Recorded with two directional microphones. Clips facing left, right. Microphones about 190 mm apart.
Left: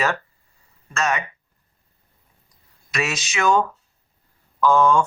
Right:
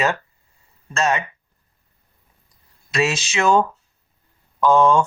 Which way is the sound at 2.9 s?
30° right (ahead or behind).